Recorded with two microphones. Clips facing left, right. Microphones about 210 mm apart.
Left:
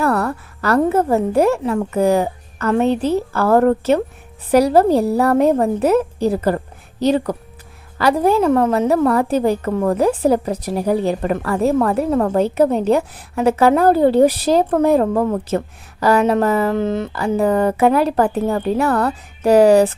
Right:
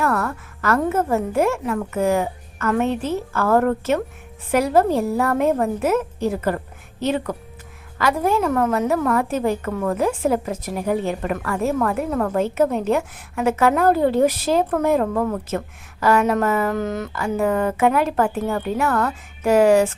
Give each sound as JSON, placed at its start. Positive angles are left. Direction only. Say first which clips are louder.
{"t": 0.0, "sound": "a woman's voice", "louder": "left 4 dB", "side_deg": 35}